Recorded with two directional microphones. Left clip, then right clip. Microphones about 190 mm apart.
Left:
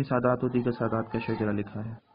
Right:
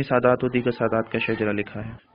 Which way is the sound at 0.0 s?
25° right (ahead or behind).